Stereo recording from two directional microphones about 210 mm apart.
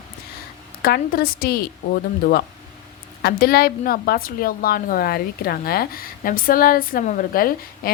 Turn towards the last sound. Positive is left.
turn(degrees=45)  # may be behind; listen again after turning